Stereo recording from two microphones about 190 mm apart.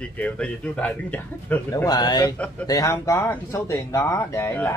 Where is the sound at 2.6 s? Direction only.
20° left (ahead or behind).